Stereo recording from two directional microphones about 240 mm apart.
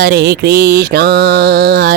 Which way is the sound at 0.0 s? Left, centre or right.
Right.